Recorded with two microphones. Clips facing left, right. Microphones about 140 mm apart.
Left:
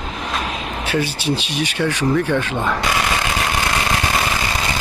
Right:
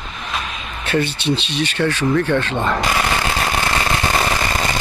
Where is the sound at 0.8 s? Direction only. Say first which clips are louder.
Right 2 dB; 10° left (ahead or behind).